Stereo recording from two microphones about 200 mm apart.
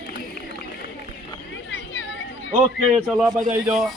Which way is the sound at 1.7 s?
70° left (ahead or behind).